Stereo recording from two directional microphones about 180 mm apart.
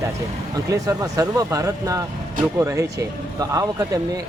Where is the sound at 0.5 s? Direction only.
20° right (ahead or behind).